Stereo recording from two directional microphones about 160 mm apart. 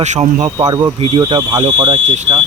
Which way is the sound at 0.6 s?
25° right (ahead or behind).